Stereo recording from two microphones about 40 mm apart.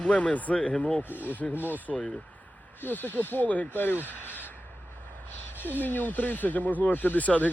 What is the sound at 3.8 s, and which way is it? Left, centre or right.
Speech, left.